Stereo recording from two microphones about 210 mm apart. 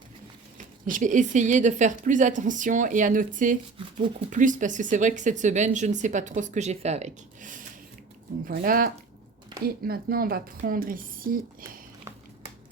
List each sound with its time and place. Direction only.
0.9 s a woman's voice: 40° right (ahead or behind)